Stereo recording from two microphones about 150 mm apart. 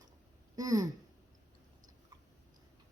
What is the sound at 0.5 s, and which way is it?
Speech, 25° right (ahead or behind).